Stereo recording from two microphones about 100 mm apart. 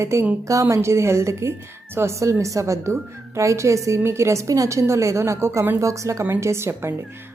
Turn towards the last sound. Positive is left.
turn(degrees=-25)  # may be behind; listen again after turning